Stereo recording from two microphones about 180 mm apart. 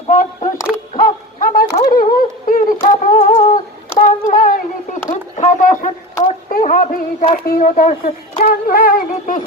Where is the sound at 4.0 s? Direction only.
50° left (ahead or behind).